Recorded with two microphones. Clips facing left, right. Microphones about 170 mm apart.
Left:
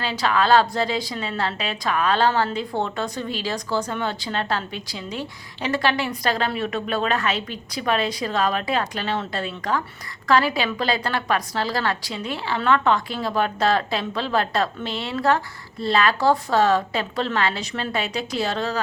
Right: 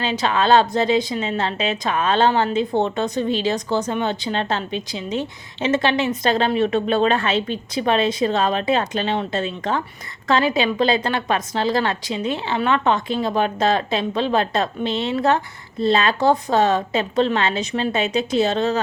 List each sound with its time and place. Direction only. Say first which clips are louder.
0.0 s a woman's voice: right 2 dB; 20° right (ahead or behind)